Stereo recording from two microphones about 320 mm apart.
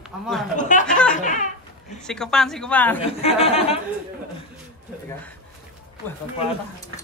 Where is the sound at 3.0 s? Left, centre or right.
Centre.